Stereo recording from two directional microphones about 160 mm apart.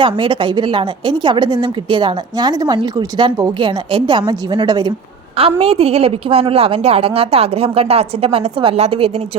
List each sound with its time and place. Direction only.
0.0 s a woman's voice: 30° right (ahead or behind)
5.4 s a woman's voice: 35° right (ahead or behind)